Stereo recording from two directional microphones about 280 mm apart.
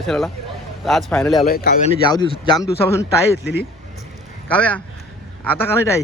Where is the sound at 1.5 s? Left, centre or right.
Left.